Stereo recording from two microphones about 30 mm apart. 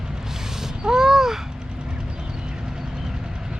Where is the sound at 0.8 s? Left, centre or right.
Centre.